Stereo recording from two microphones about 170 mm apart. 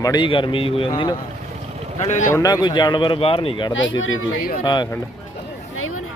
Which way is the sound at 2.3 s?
20° left (ahead or behind).